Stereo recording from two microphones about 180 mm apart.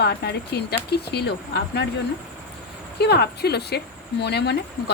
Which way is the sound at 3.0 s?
65° left (ahead or behind).